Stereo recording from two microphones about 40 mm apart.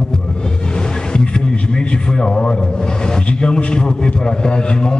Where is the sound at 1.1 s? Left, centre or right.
Left.